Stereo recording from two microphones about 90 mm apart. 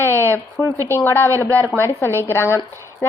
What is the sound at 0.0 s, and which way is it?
A woman's voice, 25° left (ahead or behind).